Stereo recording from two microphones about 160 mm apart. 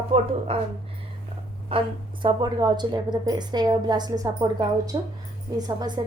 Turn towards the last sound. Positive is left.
turn(degrees=-25)  # may be behind; listen again after turning